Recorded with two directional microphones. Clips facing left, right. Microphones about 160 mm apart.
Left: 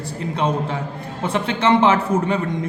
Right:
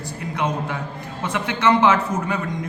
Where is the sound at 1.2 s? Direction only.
30° left (ahead or behind).